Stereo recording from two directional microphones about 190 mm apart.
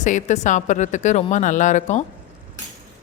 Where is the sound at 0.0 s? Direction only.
40° left (ahead or behind).